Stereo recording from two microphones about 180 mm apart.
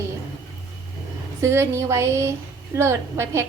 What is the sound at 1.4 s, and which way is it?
A woman's voice, 15° right (ahead or behind).